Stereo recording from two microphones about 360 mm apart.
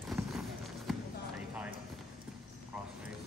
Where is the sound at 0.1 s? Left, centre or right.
Centre.